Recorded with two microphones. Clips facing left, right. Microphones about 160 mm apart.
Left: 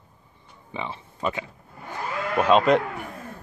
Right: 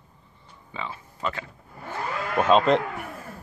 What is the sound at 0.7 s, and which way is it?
Speech, 20° left (ahead or behind).